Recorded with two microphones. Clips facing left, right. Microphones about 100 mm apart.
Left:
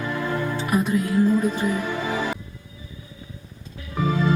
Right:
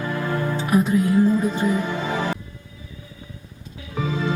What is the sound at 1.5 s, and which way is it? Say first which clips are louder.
Music: right 2 dB; 20° right (ahead or behind).